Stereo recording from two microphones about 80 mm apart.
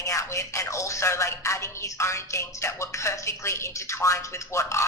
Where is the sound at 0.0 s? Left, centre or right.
Left.